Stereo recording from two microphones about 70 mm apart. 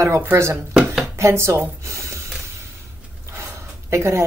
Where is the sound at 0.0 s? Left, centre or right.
Right.